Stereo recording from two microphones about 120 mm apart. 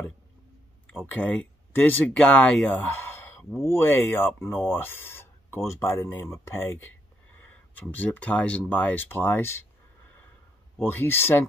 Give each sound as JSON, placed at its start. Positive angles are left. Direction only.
{"t": 1.0, "sound": "speech", "side_deg": 15}
{"t": 10.8, "sound": "speech", "side_deg": 20}